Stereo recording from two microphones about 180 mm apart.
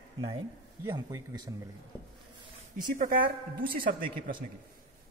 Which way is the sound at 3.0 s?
50° right (ahead or behind).